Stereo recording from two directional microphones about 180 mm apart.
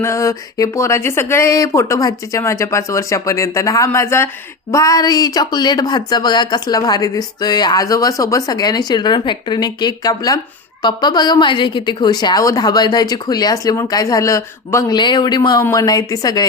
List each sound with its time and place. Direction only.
0.0 s speech: 15° left (ahead or behind)